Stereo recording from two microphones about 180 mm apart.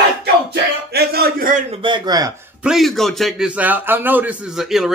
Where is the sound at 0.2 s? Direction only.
60° right (ahead or behind).